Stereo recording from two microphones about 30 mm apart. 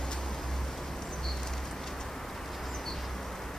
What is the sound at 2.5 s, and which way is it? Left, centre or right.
Vehicle, centre.